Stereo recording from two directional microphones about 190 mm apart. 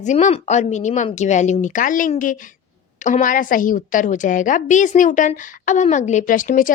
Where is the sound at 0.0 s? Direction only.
40° left (ahead or behind).